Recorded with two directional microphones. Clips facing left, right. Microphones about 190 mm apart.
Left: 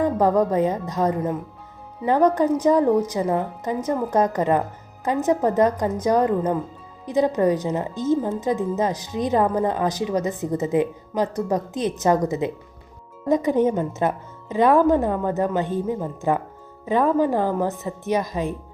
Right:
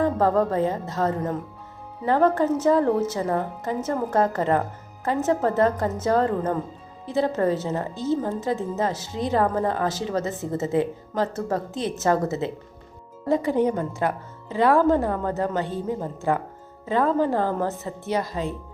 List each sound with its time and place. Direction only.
0.0 s speech: 15° left (ahead or behind)